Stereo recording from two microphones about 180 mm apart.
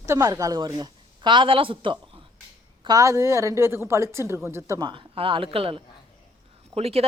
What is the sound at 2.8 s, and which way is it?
A woman's voice, 20° right (ahead or behind).